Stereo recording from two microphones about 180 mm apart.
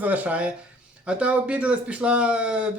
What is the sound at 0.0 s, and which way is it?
Speech, 10° right (ahead or behind).